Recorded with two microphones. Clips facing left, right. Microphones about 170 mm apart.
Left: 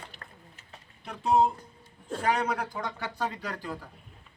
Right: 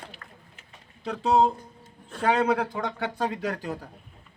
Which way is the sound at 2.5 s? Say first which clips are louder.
Right 5 dB; 60° right (ahead or behind).